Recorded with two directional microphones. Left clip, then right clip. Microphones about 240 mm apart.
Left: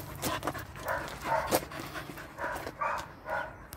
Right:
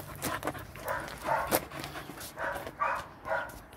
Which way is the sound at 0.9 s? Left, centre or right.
Right.